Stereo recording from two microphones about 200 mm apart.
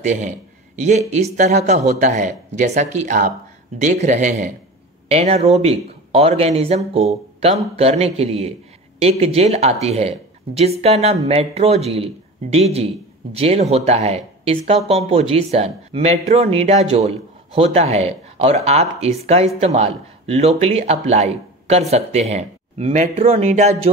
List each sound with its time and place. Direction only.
0.0 s speech: 35° right (ahead or behind)